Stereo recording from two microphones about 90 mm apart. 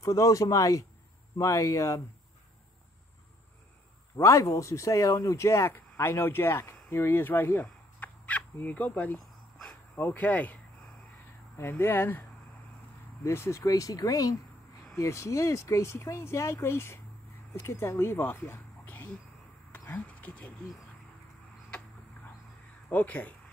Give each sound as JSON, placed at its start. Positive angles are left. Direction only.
{"t": 0.0, "sound": "speech", "side_deg": 35}
{"t": 4.2, "sound": "speech", "side_deg": 35}
{"t": 9.2, "sound": "dog", "side_deg": 5}
{"t": 9.9, "sound": "speech", "side_deg": 20}
{"t": 22.8, "sound": "speech", "side_deg": 20}